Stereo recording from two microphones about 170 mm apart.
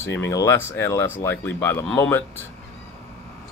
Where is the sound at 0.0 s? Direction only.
15° left (ahead or behind).